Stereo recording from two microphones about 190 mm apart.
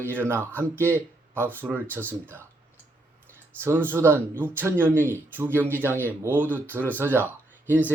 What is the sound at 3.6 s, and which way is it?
Speech, 10° right (ahead or behind).